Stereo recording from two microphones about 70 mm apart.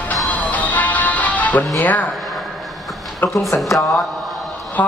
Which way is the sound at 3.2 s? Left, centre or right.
Left.